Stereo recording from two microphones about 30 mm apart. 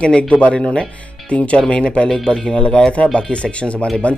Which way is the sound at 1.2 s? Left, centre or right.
Left.